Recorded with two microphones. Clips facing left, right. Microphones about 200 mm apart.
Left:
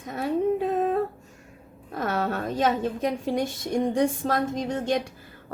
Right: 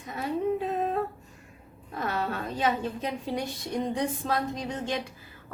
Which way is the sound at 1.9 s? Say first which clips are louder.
Left 4 dB; 50° left (ahead or behind).